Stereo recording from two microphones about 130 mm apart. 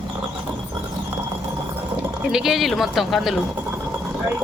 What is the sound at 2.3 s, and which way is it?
Speech, 5° right (ahead or behind).